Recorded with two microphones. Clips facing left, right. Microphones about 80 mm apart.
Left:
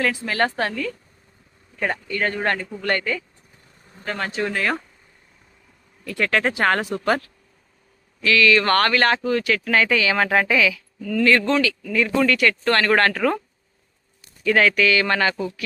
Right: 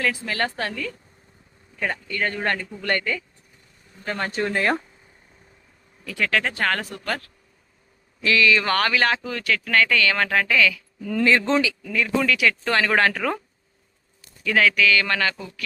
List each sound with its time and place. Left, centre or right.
0.1 s speech: centre
0.7 s speech: centre
4.5 s speech: centre
6.1 s speech: centre
8.2 s speech: right
8.5 s speech: centre
11.0 s speech: right
11.9 s speech: centre
14.4 s speech: centre